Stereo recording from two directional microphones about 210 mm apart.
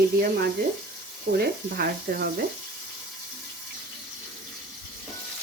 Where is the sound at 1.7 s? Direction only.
45° right (ahead or behind).